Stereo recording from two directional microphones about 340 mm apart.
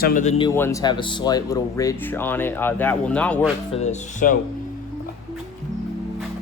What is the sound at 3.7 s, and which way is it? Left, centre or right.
Speech, left.